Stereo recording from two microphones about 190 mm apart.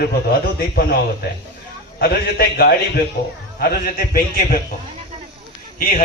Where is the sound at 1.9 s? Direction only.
55° left (ahead or behind).